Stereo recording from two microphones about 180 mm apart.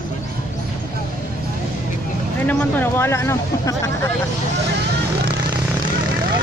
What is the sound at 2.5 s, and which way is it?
Speech, 10° left (ahead or behind).